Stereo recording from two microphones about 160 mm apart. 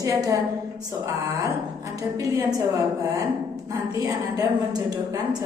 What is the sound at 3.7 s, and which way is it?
A woman's voice, 25° right (ahead or behind).